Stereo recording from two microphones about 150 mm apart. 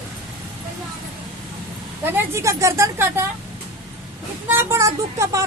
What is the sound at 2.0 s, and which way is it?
Speech, 15° right (ahead or behind).